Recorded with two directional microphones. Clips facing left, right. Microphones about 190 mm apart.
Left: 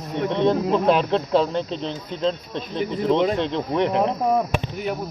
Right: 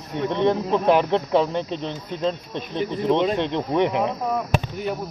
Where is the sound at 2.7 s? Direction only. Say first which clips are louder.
Even; 15° left (ahead or behind).